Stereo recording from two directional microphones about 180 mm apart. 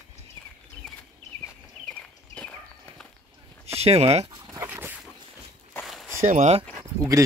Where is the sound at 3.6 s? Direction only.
35° right (ahead or behind).